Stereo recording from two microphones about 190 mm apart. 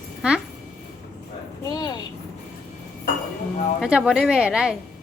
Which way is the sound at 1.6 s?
20° left (ahead or behind).